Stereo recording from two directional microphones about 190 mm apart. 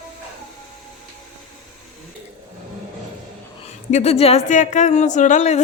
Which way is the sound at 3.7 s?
35° left (ahead or behind).